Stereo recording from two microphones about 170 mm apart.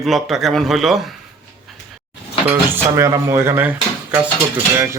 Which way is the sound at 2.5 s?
15° right (ahead or behind).